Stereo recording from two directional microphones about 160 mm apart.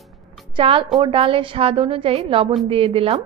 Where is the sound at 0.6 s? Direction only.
35° right (ahead or behind).